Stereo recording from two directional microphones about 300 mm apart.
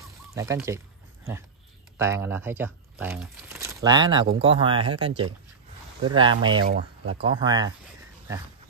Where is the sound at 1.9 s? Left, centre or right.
Centre.